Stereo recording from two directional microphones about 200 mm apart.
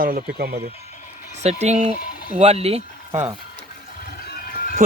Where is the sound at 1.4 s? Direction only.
35° right (ahead or behind).